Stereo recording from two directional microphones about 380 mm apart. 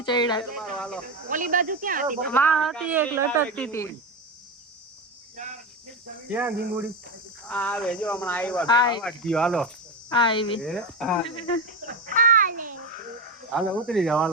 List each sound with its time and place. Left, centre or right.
0.0 s speech: centre
1.0 s speech: right
2.3 s speech: centre
6.3 s speech: centre
10.1 s speech: centre
10.6 s speech: centre
11.3 s speech: centre
12.0 s a sound: right
13.5 s speech: centre